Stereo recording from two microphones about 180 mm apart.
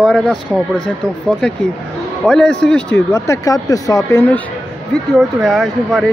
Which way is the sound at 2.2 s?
5° left (ahead or behind).